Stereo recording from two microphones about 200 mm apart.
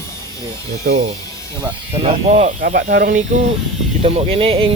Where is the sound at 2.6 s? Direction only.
45° right (ahead or behind).